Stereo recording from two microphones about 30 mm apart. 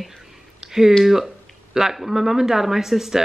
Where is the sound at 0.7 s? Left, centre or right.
Centre.